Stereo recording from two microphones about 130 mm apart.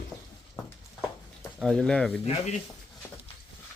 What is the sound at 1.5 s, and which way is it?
Speech, 5° left (ahead or behind).